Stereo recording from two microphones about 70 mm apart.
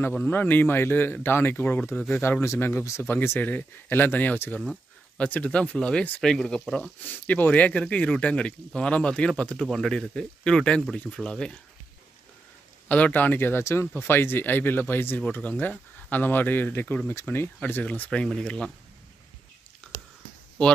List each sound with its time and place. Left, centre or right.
0.2 s speech: left
2.4 s speech: left; by 6.6 s centre
7.0 s speech: left; by 11.5 s centre
12.8 s speech: left
17.6 s speech: left
19.8 s whispering: centre
20.6 s speech: centre